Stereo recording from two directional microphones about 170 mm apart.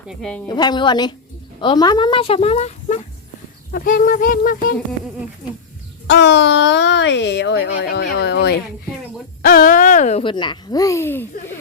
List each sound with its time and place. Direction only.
0.1 s a woman's voice: 5° left (ahead or behind)
0.4 s speech: 25° left (ahead or behind)
3.7 s speech: 55° left (ahead or behind)
6.1 s speech: 90° left; by 8.6 s 70° left (ahead or behind)
9.4 s speech: 60° left (ahead or behind); by 11.5 s 15° left (ahead or behind)